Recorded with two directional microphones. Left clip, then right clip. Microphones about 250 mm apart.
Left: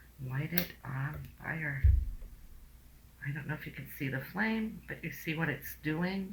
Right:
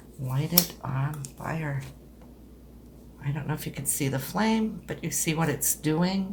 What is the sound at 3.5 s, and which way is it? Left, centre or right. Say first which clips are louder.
Speech: right 10 dB; right.